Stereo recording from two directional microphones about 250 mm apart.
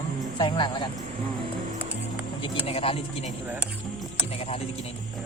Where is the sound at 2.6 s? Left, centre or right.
Left.